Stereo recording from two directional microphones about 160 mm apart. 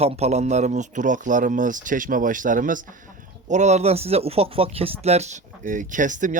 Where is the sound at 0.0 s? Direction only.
40° right (ahead or behind).